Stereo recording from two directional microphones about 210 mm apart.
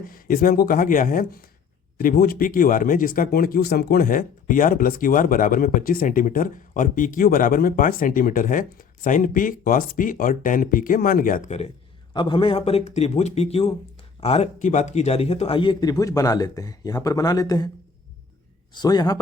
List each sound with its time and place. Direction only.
0.1 s speech: 45° left (ahead or behind); by 17.7 s 15° left (ahead or behind)
18.7 s speech: 20° left (ahead or behind)